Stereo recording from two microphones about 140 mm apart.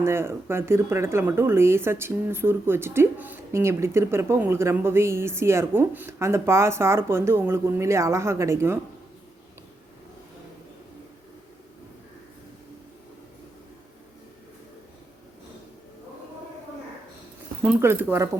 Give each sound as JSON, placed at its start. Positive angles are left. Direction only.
{"t": 0.0, "sound": "speech", "side_deg": -15}
{"t": 17.7, "sound": "speech", "side_deg": -15}